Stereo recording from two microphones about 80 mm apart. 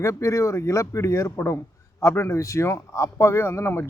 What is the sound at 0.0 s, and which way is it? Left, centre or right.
A man's voice, left.